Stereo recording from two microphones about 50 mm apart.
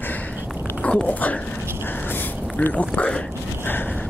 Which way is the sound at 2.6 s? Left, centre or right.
Left.